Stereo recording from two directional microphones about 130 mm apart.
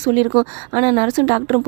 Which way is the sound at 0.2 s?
40° right (ahead or behind).